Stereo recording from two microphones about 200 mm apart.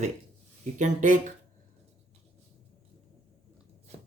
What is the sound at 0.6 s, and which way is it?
Speech, 40° right (ahead or behind).